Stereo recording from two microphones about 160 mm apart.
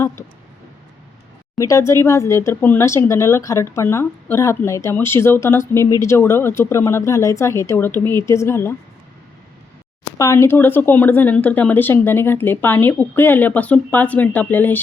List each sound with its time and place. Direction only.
1.5 s speech: 20° left (ahead or behind)
10.2 s speech: 15° left (ahead or behind)